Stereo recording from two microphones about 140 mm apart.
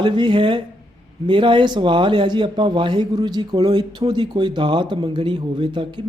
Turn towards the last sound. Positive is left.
turn(degrees=-35)  # may be behind; listen again after turning